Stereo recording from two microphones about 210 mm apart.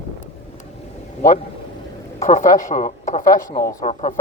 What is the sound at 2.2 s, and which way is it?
Speech, 35° left (ahead or behind).